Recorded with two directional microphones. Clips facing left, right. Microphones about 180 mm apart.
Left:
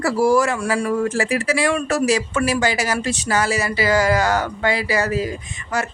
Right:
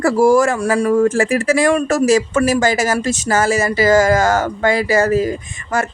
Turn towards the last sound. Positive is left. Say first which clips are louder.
# right 4 dB
turn(degrees=-45)  # may be behind; listen again after turning